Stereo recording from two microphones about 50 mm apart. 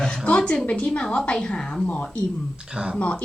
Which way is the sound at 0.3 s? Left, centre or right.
Left.